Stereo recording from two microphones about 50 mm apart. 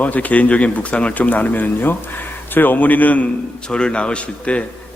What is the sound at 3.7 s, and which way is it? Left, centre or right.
Speech, centre.